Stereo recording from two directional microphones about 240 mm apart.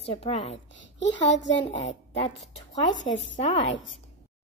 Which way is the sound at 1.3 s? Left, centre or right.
Left.